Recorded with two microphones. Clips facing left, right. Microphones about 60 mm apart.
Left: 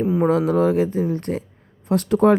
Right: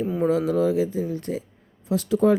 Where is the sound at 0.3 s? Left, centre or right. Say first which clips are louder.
Left 1 dB; left.